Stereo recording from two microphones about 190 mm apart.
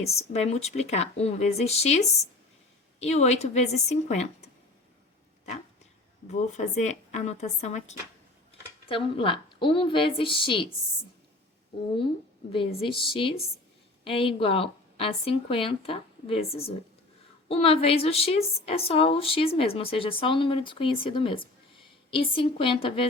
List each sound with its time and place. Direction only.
0.1 s speech: 35° left (ahead or behind)
6.3 s a woman's voice: 40° left (ahead or behind)
12.5 s a woman's voice: 25° left (ahead or behind)